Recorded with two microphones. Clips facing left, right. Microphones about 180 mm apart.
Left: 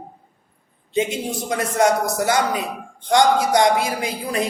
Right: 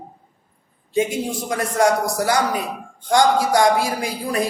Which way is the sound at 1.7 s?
20° left (ahead or behind).